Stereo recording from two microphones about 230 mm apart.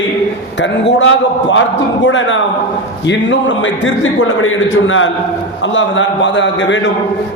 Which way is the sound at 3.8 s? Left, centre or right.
Left.